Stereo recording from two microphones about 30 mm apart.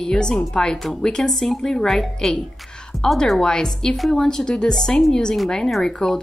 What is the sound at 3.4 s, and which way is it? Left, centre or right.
A woman's voice, left.